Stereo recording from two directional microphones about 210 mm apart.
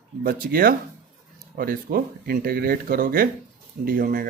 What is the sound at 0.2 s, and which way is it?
Speech, 45° right (ahead or behind).